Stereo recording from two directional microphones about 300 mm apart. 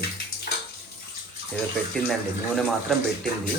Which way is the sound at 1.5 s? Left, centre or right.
Centre.